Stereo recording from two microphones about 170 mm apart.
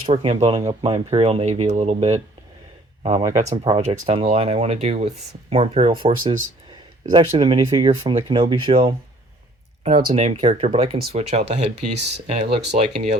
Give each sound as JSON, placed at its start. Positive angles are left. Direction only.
{"t": 0.0, "sound": "speech", "side_deg": -30}
{"t": 10.2, "sound": "speech", "side_deg": -40}